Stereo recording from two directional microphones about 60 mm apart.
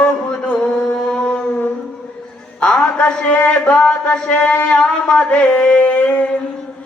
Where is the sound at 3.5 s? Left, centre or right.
Centre.